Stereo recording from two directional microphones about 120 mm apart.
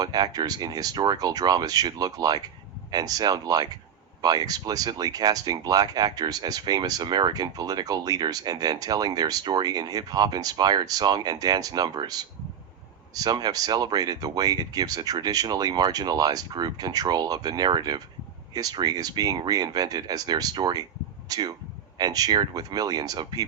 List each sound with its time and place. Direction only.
0.0 s speech: 35° right (ahead or behind)